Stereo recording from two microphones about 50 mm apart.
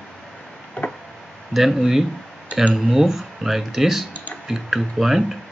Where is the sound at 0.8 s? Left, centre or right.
Left.